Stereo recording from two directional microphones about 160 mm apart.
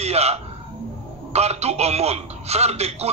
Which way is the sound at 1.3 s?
40° right (ahead or behind).